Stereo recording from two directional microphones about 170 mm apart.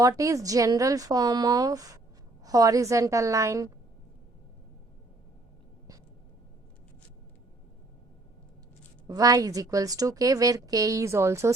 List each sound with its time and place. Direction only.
0.0 s a woman's voice: 20° right (ahead or behind)
9.0 s a woman's voice: 20° right (ahead or behind)